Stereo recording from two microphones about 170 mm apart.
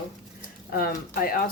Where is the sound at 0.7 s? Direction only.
60° left (ahead or behind).